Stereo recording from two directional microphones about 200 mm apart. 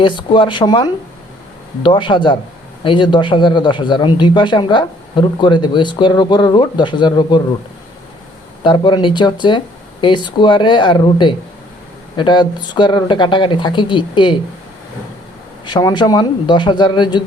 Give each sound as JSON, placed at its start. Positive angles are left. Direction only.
{"t": 0.0, "sound": "speech", "side_deg": 25}
{"t": 8.6, "sound": "speech", "side_deg": 25}
{"t": 15.6, "sound": "speech", "side_deg": 20}